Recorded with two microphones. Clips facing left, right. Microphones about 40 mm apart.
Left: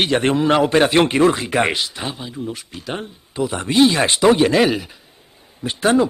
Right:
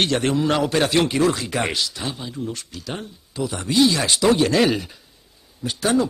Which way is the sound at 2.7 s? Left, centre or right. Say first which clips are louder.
Left 4 dB; left.